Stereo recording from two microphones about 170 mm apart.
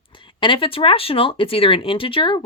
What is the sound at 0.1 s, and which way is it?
Speech, 30° left (ahead or behind).